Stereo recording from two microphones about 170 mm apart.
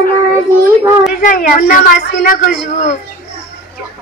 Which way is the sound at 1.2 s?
50° left (ahead or behind).